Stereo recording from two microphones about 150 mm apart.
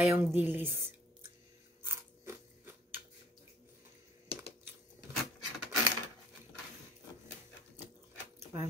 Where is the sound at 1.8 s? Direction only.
15° right (ahead or behind).